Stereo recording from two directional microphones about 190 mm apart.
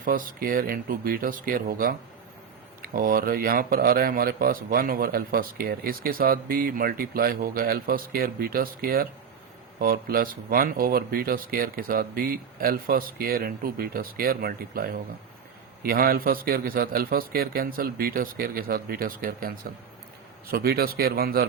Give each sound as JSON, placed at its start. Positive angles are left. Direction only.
{"t": 0.0, "sound": "speech", "side_deg": -45}
{"t": 20.5, "sound": "speech", "side_deg": -50}